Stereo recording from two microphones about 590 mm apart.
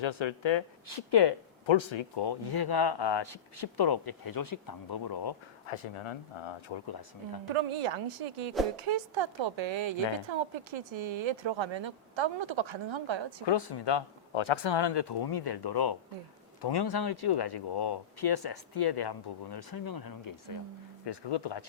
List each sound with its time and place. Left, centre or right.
0.0 s speech: left
5.6 s speech: left
7.5 s speech: right
13.4 s speech: left